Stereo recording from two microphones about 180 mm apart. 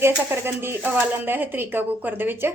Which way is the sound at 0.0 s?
10° right (ahead or behind).